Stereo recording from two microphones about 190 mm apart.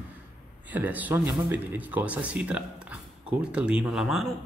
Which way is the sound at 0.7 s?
10° right (ahead or behind).